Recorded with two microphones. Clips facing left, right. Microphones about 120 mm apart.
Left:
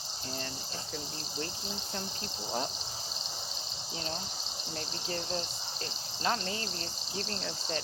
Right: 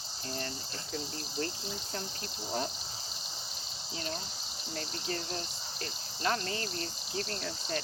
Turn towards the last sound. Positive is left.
turn(degrees=15)  # may be behind; listen again after turning